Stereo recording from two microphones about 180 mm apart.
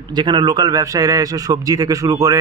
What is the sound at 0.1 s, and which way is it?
A man's voice, 25° right (ahead or behind).